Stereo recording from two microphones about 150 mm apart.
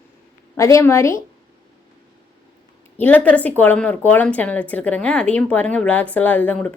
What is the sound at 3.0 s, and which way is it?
Speech, 10° left (ahead or behind).